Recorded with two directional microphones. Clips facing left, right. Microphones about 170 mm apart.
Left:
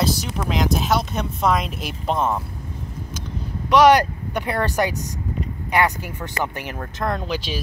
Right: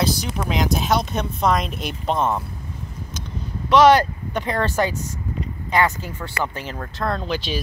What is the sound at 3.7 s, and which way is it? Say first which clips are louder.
Speech: even; 15° left (ahead or behind).